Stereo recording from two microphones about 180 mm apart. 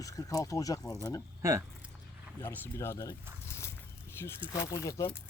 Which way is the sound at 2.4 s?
15° left (ahead or behind).